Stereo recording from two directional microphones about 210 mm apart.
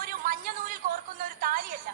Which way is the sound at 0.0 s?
40° right (ahead or behind).